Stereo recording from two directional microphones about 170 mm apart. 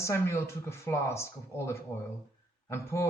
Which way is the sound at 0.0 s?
15° left (ahead or behind).